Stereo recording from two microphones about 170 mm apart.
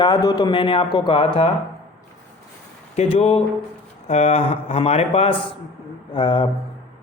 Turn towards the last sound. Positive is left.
turn(degrees=30)  # may be behind; listen again after turning